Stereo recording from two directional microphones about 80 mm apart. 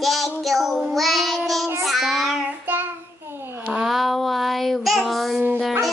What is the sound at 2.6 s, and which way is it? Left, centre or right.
Child singing, right.